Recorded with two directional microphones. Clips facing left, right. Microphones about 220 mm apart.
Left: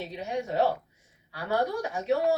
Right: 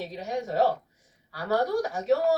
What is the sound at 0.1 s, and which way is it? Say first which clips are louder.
Speech: right 1 dB; 35° right (ahead or behind).